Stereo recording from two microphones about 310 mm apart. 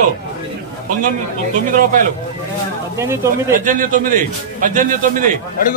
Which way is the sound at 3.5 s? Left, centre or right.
Right.